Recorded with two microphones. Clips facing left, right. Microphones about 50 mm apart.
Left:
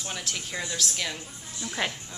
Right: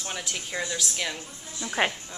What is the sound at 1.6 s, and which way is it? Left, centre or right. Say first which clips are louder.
Speech: right 5 dB; right.